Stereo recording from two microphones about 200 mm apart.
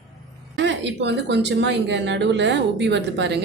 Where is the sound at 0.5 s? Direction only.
60° right (ahead or behind).